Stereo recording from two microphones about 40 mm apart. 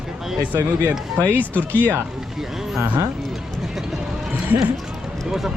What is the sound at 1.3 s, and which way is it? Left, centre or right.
Speech, left.